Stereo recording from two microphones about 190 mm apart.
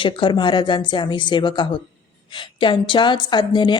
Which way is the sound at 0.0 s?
25° left (ahead or behind).